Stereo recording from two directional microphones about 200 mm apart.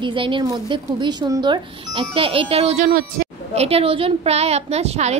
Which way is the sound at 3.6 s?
30° right (ahead or behind).